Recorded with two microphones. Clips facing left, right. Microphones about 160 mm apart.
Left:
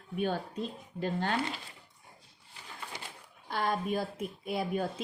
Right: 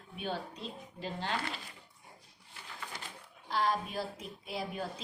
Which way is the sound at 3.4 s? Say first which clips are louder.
Left 1 dB; 55° left (ahead or behind).